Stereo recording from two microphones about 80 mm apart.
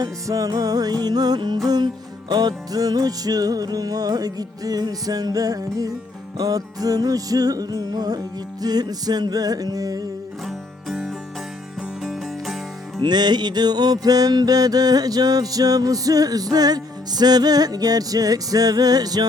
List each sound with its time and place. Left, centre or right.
0.0 s music: right
10.4 s music: centre
13.0 s music: right